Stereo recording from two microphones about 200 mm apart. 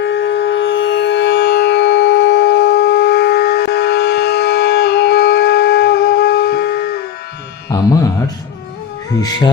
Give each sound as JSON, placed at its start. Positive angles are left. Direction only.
{"t": 0.0, "sound": "music", "side_deg": 60}